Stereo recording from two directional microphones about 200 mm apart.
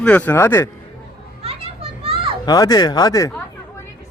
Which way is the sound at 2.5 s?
20° left (ahead or behind).